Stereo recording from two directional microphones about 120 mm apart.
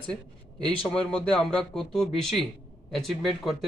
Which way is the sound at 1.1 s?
5° left (ahead or behind).